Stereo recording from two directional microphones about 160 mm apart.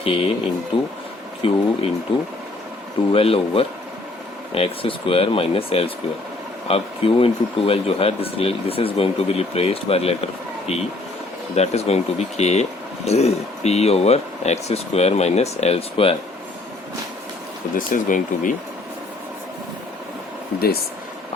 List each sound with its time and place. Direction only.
0.0 s speech: 35° left (ahead or behind)
17.7 s speech: 55° left (ahead or behind)